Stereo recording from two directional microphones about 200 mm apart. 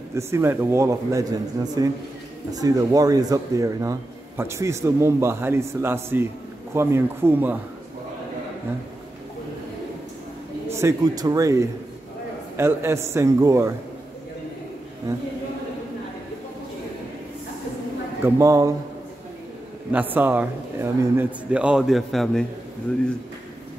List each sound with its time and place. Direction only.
0.1 s speech: 15° right (ahead or behind)
10.7 s speech: 15° right (ahead or behind)
18.2 s speech: 15° right (ahead or behind)
19.9 s a man's voice: 10° right (ahead or behind)